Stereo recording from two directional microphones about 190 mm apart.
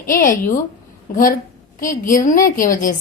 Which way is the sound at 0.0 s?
45° left (ahead or behind).